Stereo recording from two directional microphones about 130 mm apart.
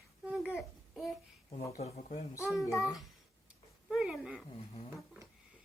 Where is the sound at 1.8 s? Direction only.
55° left (ahead or behind).